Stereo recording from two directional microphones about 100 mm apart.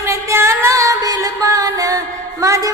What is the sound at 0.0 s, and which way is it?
Music, 30° right (ahead or behind).